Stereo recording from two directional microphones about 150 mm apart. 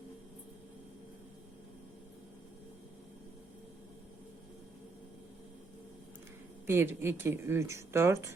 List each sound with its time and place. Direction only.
6.7 s speech: 15° right (ahead or behind)